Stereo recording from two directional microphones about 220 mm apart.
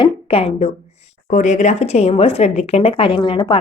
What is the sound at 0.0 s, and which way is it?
Speech, 25° left (ahead or behind).